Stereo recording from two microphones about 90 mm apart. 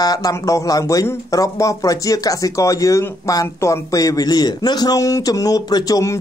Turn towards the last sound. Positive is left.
turn(degrees=40)  # may be behind; listen again after turning